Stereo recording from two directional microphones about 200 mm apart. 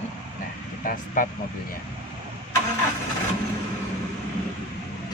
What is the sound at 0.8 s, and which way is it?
Speech, 45° left (ahead or behind).